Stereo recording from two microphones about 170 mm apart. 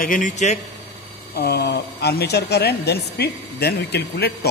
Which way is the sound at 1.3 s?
70° left (ahead or behind).